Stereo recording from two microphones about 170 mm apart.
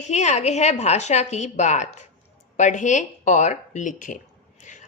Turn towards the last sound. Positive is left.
turn(degrees=50)  # may be behind; listen again after turning